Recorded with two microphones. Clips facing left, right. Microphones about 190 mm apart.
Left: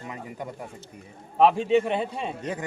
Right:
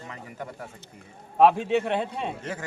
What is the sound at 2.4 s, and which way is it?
Speech, 20° left (ahead or behind).